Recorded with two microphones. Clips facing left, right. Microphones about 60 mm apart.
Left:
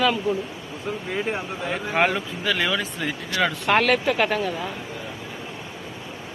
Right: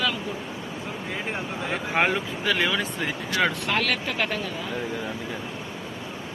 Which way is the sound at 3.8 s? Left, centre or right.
Left.